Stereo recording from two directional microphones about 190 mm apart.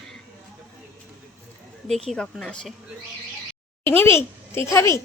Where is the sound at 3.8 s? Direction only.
10° left (ahead or behind).